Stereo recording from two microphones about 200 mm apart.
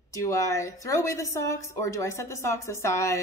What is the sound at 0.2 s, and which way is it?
Speech, 15° left (ahead or behind).